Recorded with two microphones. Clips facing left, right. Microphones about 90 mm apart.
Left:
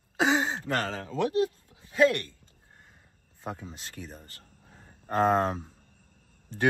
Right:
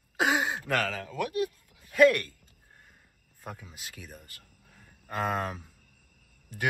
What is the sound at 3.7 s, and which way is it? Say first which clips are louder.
Speech: left 3 dB; 5° right (ahead or behind).